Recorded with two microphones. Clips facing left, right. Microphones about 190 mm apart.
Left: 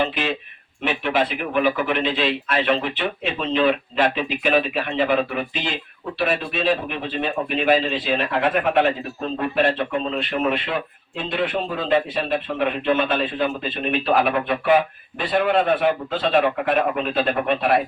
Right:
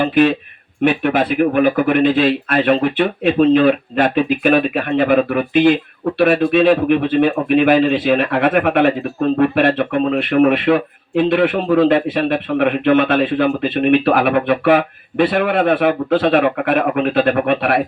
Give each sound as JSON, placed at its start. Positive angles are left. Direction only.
{"t": 0.0, "sound": "speech", "side_deg": -55}